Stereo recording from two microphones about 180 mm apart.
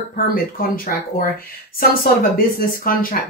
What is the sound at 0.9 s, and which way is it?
Speech, 50° left (ahead or behind).